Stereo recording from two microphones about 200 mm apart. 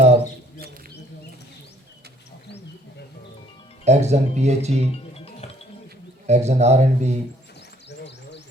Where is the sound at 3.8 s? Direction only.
35° right (ahead or behind).